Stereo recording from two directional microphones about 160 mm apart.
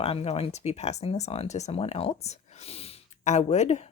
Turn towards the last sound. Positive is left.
turn(degrees=45)  # may be behind; listen again after turning